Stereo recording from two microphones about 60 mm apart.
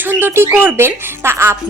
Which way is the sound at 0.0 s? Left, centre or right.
Right.